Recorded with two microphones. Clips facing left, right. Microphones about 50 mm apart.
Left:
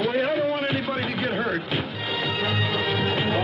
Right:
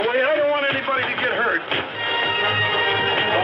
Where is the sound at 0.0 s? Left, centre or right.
Right.